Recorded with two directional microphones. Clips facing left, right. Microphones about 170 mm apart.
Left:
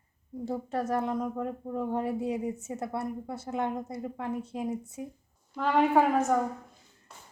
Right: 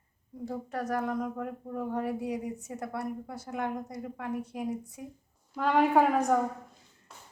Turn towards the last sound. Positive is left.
turn(degrees=0)  # may be behind; listen again after turning